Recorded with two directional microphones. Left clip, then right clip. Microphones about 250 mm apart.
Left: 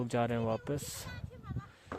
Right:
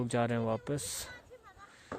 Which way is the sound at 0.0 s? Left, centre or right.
Centre.